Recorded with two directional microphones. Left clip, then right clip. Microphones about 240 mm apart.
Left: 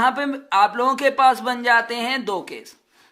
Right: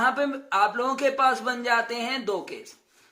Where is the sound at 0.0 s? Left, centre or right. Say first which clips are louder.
Left 4 dB; left.